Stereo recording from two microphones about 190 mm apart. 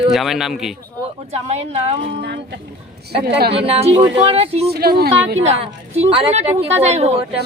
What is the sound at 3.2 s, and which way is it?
Speech, 55° right (ahead or behind).